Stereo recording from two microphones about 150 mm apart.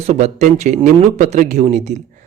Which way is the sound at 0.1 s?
50° right (ahead or behind).